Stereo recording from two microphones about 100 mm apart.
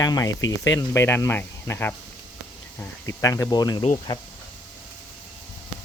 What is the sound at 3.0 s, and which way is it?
Speech, 35° left (ahead or behind).